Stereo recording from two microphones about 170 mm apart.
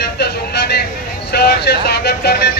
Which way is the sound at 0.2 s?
70° left (ahead or behind).